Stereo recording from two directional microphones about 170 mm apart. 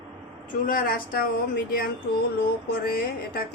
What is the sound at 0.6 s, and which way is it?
Speech, 55° left (ahead or behind).